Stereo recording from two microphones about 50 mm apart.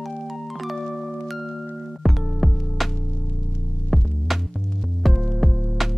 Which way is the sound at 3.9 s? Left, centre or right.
Centre.